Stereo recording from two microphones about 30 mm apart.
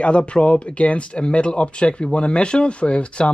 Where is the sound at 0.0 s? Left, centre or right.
Left.